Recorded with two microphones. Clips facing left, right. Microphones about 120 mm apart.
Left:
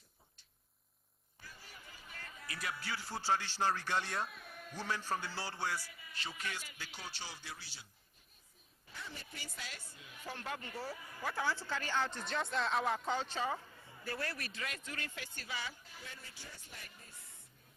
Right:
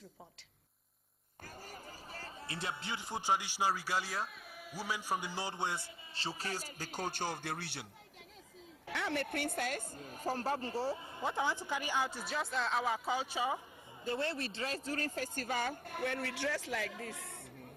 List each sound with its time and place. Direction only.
1.4 s speech: 45° right (ahead or behind); by 7.9 s 65° right (ahead or behind)
8.8 s speech: 75° right (ahead or behind); by 13.6 s 10° right (ahead or behind)
14.0 s speech: 25° right (ahead or behind); by 17.4 s 90° right